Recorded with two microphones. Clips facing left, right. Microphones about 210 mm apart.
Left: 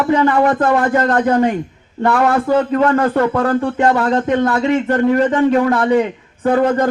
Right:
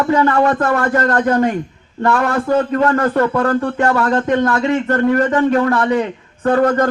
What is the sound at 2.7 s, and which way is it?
Speech, 20° left (ahead or behind).